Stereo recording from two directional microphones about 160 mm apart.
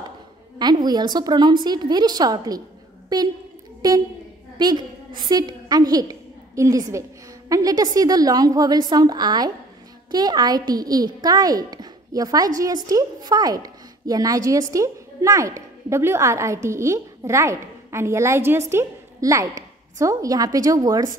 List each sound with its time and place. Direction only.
0.6 s a woman's voice: 25° right (ahead or behind)
4.6 s a woman's voice: 25° right (ahead or behind)